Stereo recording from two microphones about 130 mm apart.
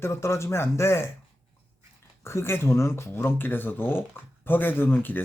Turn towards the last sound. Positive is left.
turn(degrees=15)  # may be behind; listen again after turning